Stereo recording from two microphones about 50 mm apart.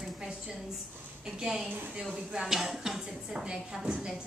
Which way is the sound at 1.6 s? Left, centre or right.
Right.